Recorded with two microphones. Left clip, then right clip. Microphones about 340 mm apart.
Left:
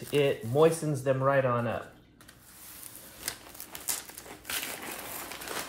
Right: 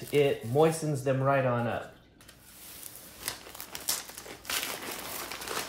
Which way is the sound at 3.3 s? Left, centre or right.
Centre.